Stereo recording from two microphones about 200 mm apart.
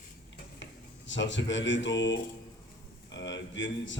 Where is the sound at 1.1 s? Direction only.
65° left (ahead or behind).